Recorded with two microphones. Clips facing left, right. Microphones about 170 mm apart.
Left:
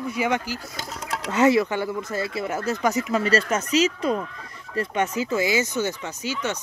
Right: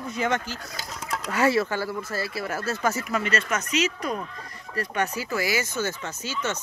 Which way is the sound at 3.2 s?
35° left (ahead or behind).